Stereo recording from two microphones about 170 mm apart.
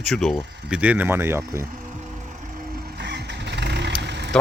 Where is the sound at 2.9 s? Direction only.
80° right.